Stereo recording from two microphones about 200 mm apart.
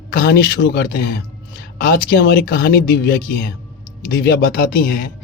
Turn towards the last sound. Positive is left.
turn(degrees=50)  # may be behind; listen again after turning